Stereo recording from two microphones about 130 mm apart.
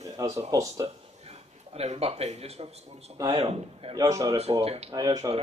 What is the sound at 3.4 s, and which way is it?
Speech, 50° right (ahead or behind).